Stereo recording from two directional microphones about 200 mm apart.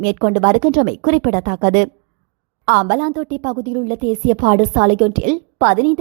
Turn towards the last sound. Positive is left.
turn(degrees=-40)  # may be behind; listen again after turning